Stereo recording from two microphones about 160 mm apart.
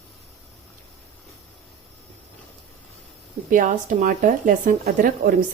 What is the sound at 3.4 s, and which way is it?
Speech, 55° right (ahead or behind).